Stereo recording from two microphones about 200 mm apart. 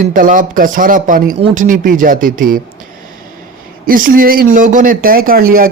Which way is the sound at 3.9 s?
45° right (ahead or behind).